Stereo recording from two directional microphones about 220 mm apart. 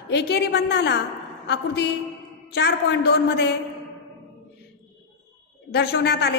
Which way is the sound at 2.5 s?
50° left (ahead or behind).